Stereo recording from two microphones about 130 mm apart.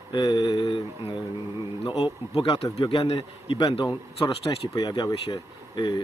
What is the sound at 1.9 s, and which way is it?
Speech, 30° left (ahead or behind).